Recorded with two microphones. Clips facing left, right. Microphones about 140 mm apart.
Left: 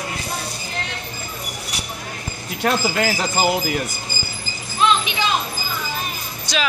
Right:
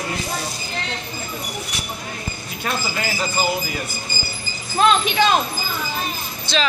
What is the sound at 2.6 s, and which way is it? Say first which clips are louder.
Speech: left 6 dB; 70° left (ahead or behind).